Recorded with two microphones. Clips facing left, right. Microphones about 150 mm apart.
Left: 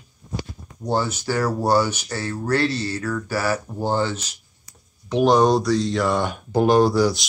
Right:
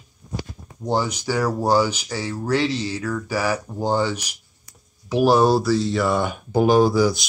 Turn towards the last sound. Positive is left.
turn(degrees=0)  # may be behind; listen again after turning